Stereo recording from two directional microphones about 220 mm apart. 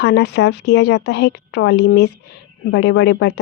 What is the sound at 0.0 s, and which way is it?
Speech, 50° left (ahead or behind).